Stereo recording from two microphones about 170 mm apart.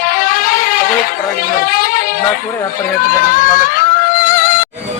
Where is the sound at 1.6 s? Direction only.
55° left (ahead or behind).